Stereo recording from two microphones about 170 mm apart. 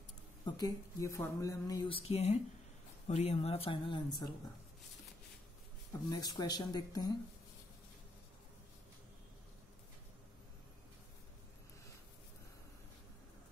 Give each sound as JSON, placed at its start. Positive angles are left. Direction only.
{"t": 0.5, "sound": "speech", "side_deg": 25}
{"t": 6.0, "sound": "speech", "side_deg": 25}